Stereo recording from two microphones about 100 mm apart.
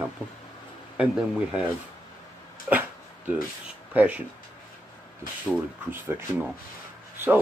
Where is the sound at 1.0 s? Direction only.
10° right (ahead or behind).